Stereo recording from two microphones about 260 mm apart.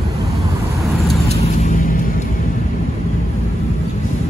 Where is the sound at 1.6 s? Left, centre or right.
Left.